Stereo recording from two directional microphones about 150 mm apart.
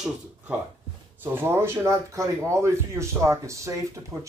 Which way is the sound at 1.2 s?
15° right (ahead or behind).